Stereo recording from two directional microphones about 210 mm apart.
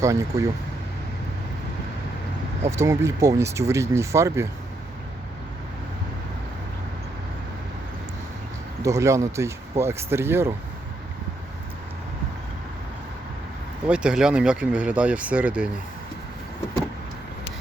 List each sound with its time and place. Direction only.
0.0 s speech: 15° right (ahead or behind)
2.6 s speech: 15° right (ahead or behind)
8.8 s speech: 15° right (ahead or behind)
13.8 s speech: 5° right (ahead or behind)